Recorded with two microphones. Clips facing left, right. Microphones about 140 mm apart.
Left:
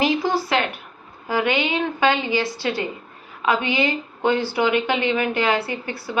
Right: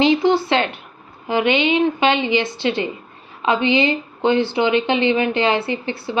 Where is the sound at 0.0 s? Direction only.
25° right (ahead or behind).